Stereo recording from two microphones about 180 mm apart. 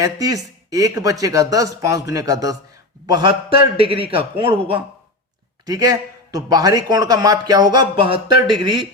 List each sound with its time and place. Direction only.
0.0 s a man's voice: 20° right (ahead or behind)